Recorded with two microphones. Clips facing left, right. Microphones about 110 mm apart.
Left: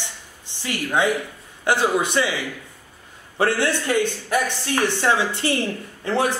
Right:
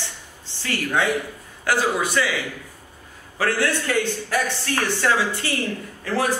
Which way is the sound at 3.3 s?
25° left (ahead or behind).